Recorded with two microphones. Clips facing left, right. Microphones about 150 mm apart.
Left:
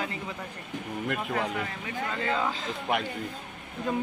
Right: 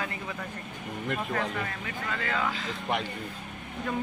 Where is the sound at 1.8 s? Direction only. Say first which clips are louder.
Left 3 dB; 25° left (ahead or behind).